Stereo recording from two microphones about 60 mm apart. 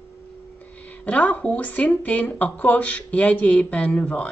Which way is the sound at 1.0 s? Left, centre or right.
Left.